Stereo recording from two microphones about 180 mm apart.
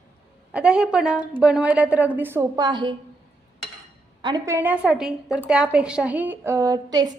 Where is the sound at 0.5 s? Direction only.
5° right (ahead or behind); by 2.9 s 25° right (ahead or behind).